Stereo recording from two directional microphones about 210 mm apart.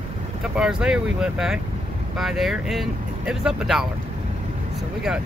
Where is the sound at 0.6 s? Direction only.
5° right (ahead or behind).